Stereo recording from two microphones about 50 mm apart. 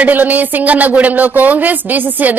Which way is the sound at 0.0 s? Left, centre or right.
Right.